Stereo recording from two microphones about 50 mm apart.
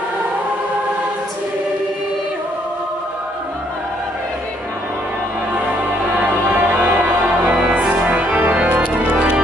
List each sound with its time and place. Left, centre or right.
5.5 s music: right
7.7 s organ: right